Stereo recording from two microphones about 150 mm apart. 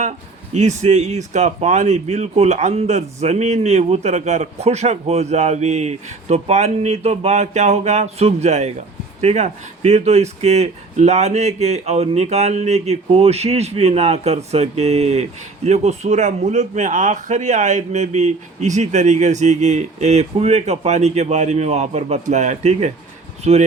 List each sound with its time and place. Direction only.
0.5 s speech: 50° right (ahead or behind)